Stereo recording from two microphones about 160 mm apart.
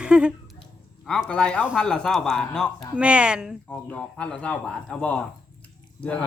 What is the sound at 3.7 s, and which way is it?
A man's voice, 10° left (ahead or behind).